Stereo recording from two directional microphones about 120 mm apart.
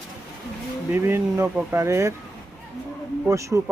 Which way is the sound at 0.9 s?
20° right (ahead or behind).